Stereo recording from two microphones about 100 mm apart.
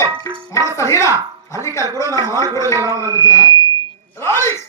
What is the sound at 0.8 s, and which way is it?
Speech, 30° left (ahead or behind).